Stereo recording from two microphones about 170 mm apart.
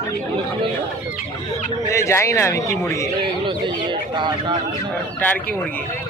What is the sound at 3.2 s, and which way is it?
Speech, 30° right (ahead or behind).